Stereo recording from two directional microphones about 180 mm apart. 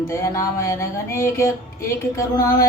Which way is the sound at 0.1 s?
15° left (ahead or behind).